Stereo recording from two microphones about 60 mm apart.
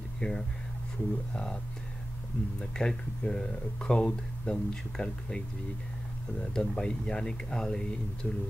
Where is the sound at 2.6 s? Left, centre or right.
Centre.